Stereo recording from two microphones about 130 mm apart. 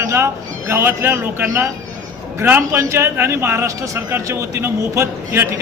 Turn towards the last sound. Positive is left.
turn(degrees=-20)  # may be behind; listen again after turning